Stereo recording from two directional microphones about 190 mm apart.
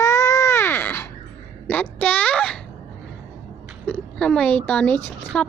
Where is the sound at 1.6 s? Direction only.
5° left (ahead or behind).